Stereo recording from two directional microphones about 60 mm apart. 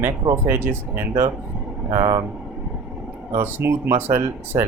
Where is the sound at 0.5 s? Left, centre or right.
Right.